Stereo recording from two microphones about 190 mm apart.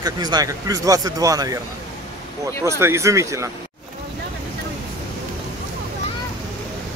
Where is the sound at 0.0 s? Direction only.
20° right (ahead or behind).